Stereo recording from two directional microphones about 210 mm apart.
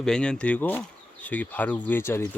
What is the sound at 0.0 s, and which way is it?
Speech, 5° left (ahead or behind).